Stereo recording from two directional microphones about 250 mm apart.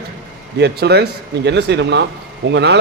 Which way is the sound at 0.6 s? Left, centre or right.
Right.